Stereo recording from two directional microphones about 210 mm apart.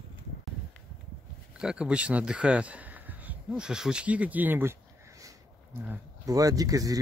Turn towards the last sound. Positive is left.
turn(degrees=-15)  # may be behind; listen again after turning